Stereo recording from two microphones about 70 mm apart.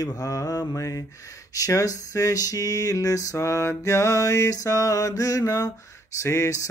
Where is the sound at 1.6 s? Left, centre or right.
Left.